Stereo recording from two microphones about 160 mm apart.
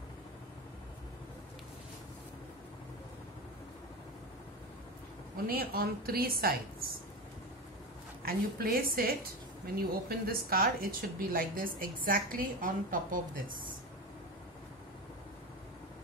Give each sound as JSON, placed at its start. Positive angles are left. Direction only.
{"t": 5.5, "sound": "a woman's voice", "side_deg": -70}
{"t": 8.2, "sound": "a woman's voice", "side_deg": -70}